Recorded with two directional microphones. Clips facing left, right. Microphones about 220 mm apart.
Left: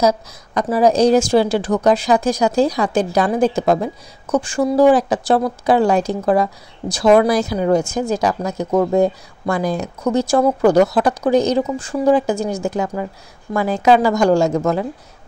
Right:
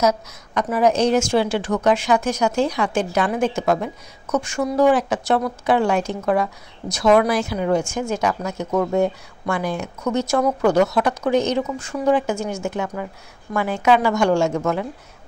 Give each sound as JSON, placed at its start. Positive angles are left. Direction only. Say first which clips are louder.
{"t": 0.0, "sound": "a woman's voice", "louder": "left 3 dB", "side_deg": 30}